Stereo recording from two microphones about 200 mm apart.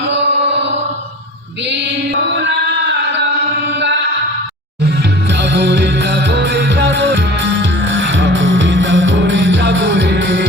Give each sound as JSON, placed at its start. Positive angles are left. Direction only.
{"t": 0.4, "sound": "music", "side_deg": -65}
{"t": 2.2, "sound": "chant", "side_deg": -65}
{"t": 5.4, "sound": "music", "side_deg": -55}